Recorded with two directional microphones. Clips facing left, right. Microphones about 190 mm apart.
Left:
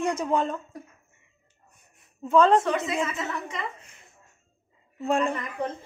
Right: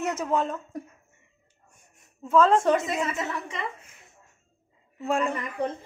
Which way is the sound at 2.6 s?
45° right (ahead or behind).